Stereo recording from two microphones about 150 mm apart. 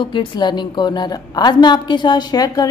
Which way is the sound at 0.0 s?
35° left (ahead or behind).